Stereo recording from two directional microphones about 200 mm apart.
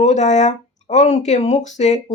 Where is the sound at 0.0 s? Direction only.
35° left (ahead or behind).